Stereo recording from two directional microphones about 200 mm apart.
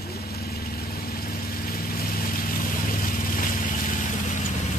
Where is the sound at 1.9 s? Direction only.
45° left (ahead or behind).